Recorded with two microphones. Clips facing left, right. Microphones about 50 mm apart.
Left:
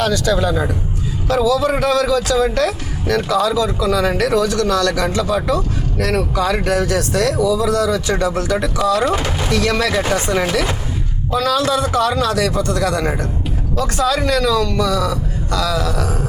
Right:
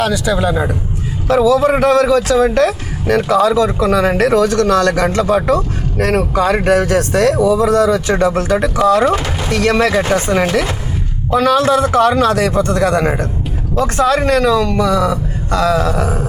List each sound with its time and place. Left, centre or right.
0.0 s speech: centre
1.3 s a man's voice: right